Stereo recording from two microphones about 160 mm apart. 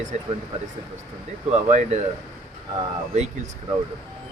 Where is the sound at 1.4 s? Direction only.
45° right (ahead or behind).